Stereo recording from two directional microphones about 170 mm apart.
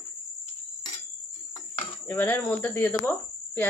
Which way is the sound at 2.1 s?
10° left (ahead or behind).